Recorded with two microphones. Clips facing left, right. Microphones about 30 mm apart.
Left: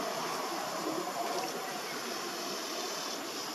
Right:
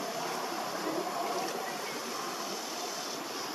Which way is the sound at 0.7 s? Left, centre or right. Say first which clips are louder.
Right 1 dB; centre.